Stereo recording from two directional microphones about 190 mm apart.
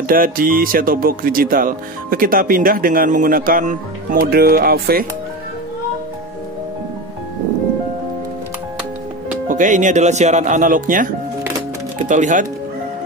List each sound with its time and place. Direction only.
0.1 s speech: 50° right (ahead or behind)
9.5 s speech: 40° right (ahead or behind)
12.1 s speech: 40° right (ahead or behind)